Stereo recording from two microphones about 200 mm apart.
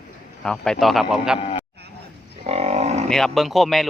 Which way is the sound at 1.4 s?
30° left (ahead or behind).